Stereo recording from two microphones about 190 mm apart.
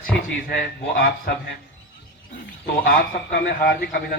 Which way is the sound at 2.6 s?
55° left (ahead or behind).